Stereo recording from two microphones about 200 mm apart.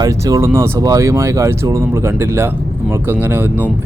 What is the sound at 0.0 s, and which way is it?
Speech, 15° right (ahead or behind).